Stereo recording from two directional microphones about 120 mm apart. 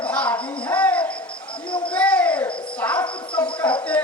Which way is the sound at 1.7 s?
45° left (ahead or behind).